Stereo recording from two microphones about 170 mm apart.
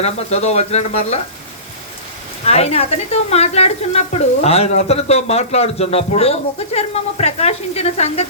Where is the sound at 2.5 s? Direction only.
40° left (ahead or behind).